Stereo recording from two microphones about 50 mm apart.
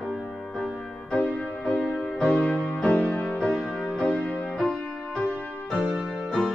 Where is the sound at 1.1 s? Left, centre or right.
Left.